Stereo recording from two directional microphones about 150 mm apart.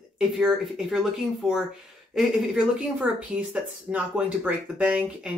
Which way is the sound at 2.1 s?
5° right (ahead or behind).